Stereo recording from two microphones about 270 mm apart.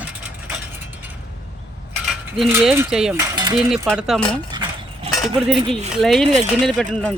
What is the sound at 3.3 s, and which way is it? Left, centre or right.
Cutlery, centre.